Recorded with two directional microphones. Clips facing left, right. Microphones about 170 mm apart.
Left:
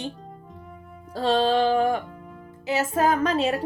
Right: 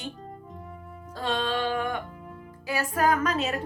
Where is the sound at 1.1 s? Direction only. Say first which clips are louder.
Left 8 dB; 35° left (ahead or behind).